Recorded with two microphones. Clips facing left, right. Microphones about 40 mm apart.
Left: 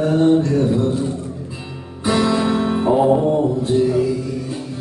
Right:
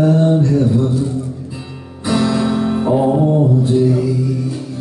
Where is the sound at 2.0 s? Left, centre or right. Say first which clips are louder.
Right 1 dB; centre.